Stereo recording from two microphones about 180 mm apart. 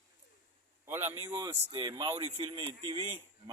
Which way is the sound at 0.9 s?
10° right (ahead or behind).